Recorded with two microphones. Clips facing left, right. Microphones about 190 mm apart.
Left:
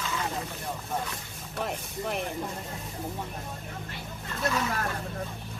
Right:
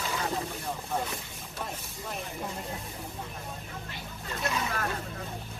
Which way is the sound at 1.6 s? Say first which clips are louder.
Left 7 dB; 70° left (ahead or behind).